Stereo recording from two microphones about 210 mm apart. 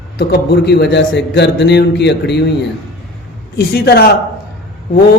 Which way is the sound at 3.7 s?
50° left (ahead or behind).